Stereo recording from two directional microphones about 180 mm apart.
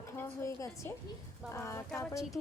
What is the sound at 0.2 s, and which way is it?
A woman's voice, 15° left (ahead or behind).